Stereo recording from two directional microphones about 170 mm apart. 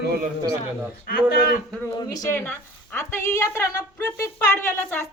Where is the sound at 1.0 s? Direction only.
60° left (ahead or behind).